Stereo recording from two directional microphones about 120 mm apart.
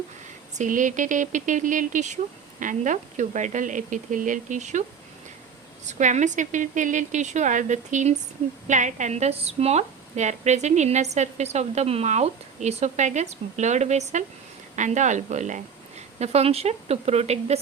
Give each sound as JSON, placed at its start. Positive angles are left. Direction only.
{"t": 0.5, "sound": "speech", "side_deg": -90}
{"t": 5.8, "sound": "a woman's voice", "side_deg": -85}
{"t": 14.8, "sound": "a woman's voice", "side_deg": -90}